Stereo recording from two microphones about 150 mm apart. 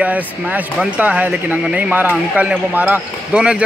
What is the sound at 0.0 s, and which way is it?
Speech, 10° right (ahead or behind).